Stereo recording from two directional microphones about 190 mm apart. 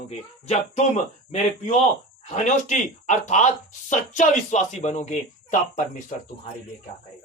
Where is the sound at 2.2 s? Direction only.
40° left (ahead or behind).